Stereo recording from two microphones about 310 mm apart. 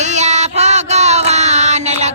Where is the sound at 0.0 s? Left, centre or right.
Right.